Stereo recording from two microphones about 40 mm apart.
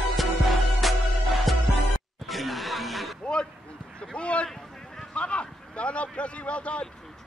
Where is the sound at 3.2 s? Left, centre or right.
Left.